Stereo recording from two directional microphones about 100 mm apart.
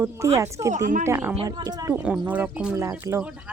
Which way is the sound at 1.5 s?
35° right (ahead or behind).